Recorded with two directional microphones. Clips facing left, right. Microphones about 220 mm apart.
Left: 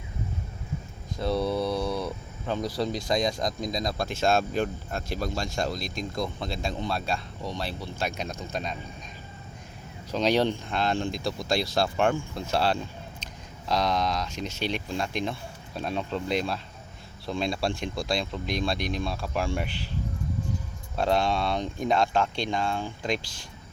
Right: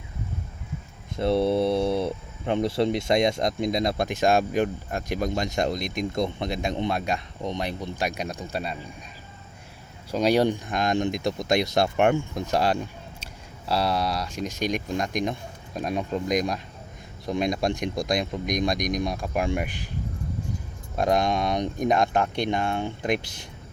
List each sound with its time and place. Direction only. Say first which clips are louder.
1.1 s speech: right 5 dB; 25° right (ahead or behind)
10.1 s speech: right 3 dB; 10° right (ahead or behind)
20.9 s speech: right 2 dB; 15° right (ahead or behind)